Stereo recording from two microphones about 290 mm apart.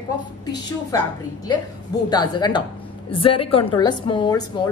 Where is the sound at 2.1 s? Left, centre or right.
Centre.